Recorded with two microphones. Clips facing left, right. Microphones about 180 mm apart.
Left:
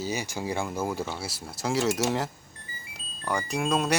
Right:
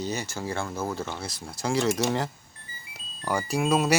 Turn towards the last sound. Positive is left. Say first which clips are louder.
# right 3 dB
turn(degrees=-5)  # may be behind; listen again after turning